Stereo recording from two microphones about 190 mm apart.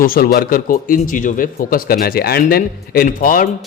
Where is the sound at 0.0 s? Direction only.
50° left (ahead or behind).